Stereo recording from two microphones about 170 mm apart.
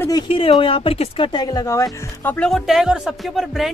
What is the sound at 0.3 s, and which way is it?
Speech, 30° left (ahead or behind).